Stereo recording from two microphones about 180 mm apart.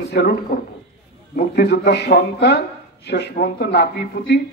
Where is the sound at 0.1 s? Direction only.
65° left (ahead or behind).